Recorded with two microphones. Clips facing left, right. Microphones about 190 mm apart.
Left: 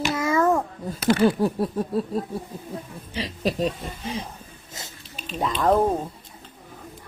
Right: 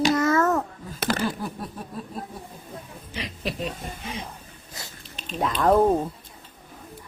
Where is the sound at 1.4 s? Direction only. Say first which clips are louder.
Left 10 dB; 35° left (ahead or behind).